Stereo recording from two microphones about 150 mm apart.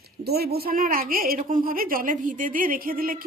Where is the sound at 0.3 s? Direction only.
90° right.